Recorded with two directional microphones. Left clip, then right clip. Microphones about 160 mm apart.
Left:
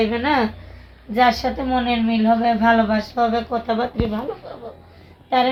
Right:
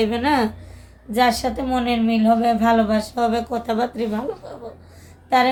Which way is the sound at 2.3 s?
25° right (ahead or behind).